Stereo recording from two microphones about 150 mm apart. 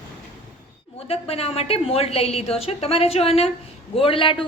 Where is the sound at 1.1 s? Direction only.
40° left (ahead or behind).